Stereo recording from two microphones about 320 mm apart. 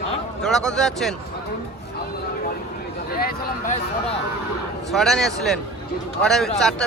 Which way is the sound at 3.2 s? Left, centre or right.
Left.